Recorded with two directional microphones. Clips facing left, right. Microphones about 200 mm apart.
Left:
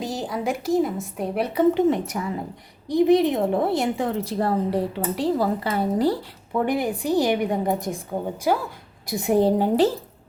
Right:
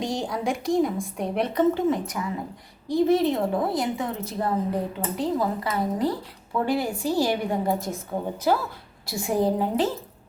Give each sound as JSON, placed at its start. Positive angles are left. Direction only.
{"t": 0.0, "sound": "a woman's voice", "side_deg": 5}
{"t": 2.1, "sound": "speech", "side_deg": 35}
{"t": 2.9, "sound": "a woman's voice", "side_deg": 15}
{"t": 6.7, "sound": "a woman's voice", "side_deg": 20}